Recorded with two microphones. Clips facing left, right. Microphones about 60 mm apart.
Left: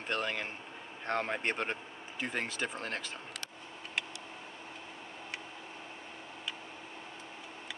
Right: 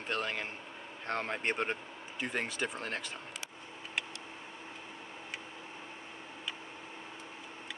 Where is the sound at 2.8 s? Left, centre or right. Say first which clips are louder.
Even; centre.